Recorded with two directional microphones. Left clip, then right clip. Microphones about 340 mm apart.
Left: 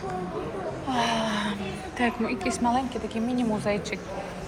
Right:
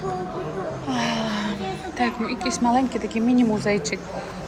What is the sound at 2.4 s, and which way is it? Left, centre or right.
Speech, centre.